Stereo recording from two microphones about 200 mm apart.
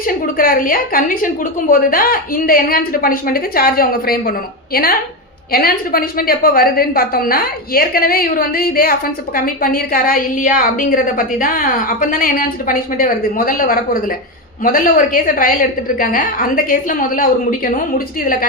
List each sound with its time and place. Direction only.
0.0 s a woman's voice: 45° left (ahead or behind)